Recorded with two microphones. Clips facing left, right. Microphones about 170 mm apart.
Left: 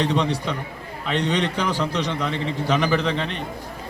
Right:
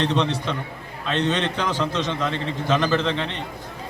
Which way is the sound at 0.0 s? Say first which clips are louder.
Even; 15° left (ahead or behind).